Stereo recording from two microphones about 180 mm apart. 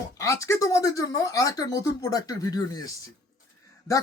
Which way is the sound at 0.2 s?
15° left (ahead or behind).